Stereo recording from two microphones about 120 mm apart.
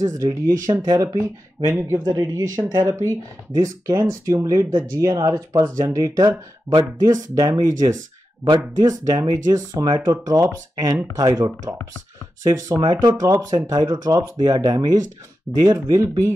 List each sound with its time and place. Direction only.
0.2 s speech: 30° right (ahead or behind)